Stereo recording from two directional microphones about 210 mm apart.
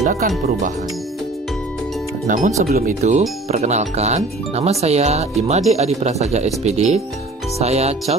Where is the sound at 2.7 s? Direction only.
40° right (ahead or behind).